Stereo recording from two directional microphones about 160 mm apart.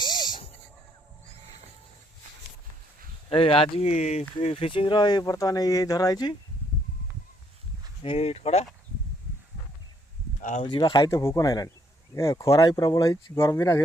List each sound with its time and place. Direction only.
0.0 s a sound: 25° left (ahead or behind)
3.2 s speech: 35° left (ahead or behind)
8.0 s speech: 40° left (ahead or behind)
10.6 s speech: 30° left (ahead or behind)